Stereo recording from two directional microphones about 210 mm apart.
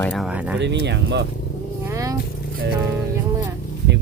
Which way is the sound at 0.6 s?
55° right (ahead or behind).